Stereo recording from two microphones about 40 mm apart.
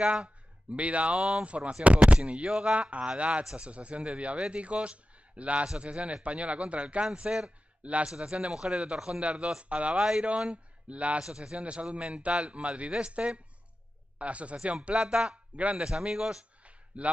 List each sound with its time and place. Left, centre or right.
0.0 s a man's voice: right
0.7 s a man's voice: right
1.1 s a man's voice: centre
1.4 s a man's voice: right
7.8 s a man's voice: right; by 9.6 s centre
9.6 s a man's voice: right
11.1 s a man's voice: centre
11.5 s a man's voice: right
15.0 s a man's voice: centre
15.5 s a man's voice: right
15.8 s a man's voice: centre
16.6 s a sound: right